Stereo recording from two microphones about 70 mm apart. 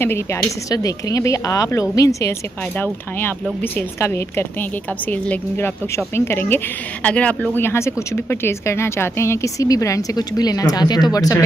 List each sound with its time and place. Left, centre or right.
0.0 s speech: left
0.7 s speech: left
2.8 s speech: left
5.1 s speech: left
5.6 s speech: left
7.0 s speech: centre
7.5 s speech: left
10.1 s speech: left